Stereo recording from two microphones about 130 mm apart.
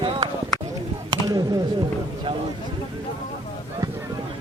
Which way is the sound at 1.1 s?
30° right (ahead or behind).